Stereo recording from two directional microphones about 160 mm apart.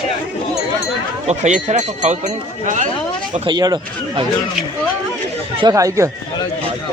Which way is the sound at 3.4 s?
25° right (ahead or behind).